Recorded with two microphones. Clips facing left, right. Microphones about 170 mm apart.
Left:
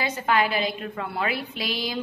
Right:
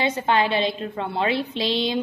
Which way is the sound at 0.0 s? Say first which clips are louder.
Right 3 dB; 25° right (ahead or behind).